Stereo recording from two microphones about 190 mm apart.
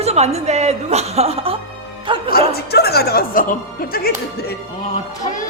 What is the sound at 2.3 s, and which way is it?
Speech, 55° left (ahead or behind).